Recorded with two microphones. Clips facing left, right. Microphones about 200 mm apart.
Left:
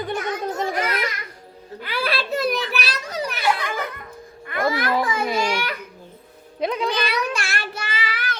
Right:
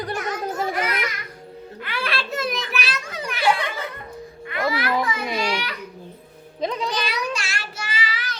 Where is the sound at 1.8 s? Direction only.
35° left (ahead or behind).